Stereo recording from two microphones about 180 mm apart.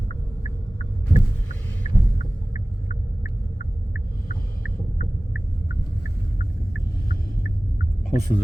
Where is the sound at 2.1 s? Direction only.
50° left (ahead or behind).